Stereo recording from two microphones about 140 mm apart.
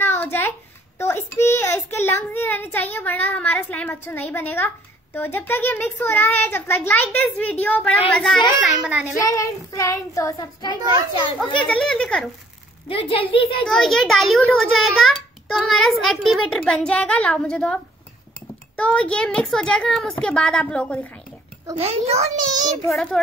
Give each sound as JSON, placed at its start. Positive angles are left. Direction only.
{"t": 0.2, "sound": "a sound", "side_deg": 15}
{"t": 0.9, "sound": "a child's voice", "side_deg": 20}
{"t": 8.1, "sound": "a child's voice", "side_deg": 0}
{"t": 9.2, "sound": "child singing", "side_deg": 25}
{"t": 11.3, "sound": "a child's voice", "side_deg": 5}
{"t": 12.8, "sound": "a child's voice", "side_deg": 40}
{"t": 13.7, "sound": "a child's voice", "side_deg": 0}
{"t": 18.8, "sound": "a child's voice", "side_deg": 10}
{"t": 21.7, "sound": "a child's voice", "side_deg": -45}
{"t": 22.8, "sound": "a child's voice", "side_deg": 0}